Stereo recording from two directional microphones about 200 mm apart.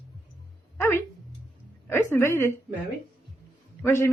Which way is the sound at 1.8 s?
15° left (ahead or behind).